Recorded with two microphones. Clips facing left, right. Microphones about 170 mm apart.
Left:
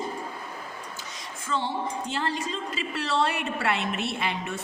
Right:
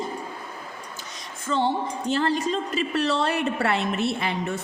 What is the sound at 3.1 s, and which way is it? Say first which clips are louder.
A woman's voice: right 3 dB; 40° right (ahead or behind).